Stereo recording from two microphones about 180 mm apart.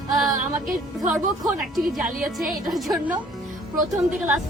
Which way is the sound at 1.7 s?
Centre (ahead or behind).